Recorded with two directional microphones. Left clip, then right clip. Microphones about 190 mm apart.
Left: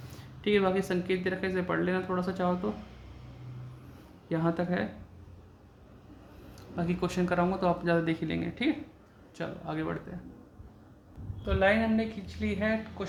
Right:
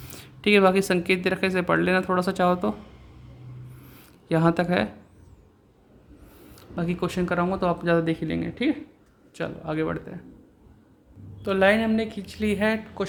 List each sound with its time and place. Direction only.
0.2 s speech: 50° right (ahead or behind)
4.3 s speech: 50° right (ahead or behind)
6.6 s speech: 30° right (ahead or behind)
9.3 s speech: 35° right (ahead or behind)
11.4 s a woman's voice: 55° right (ahead or behind)